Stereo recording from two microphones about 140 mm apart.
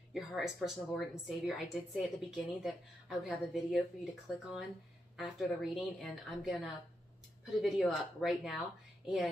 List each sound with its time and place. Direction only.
0.1 s a woman's voice: centre (ahead or behind)